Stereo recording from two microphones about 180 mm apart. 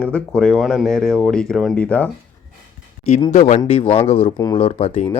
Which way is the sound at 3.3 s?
40° left (ahead or behind).